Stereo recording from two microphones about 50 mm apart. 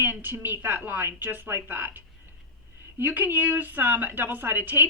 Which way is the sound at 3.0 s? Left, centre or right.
Right.